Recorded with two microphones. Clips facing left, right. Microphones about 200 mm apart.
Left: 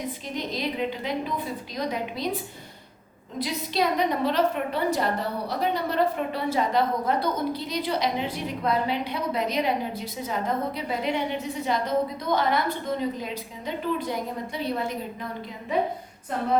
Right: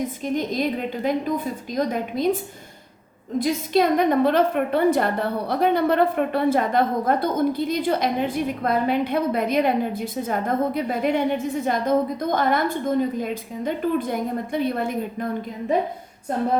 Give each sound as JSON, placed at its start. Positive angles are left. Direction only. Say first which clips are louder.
{"t": 0.3, "sound": "a woman's voice", "louder": "right 5 dB", "side_deg": -50}